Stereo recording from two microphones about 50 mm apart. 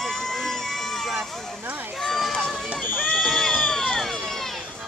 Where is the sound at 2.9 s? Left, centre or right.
Left.